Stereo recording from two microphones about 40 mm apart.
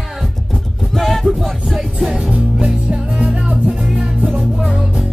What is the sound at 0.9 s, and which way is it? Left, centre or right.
Music, centre.